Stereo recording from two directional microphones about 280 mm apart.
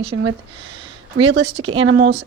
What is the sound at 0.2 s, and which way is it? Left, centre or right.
Speech, right.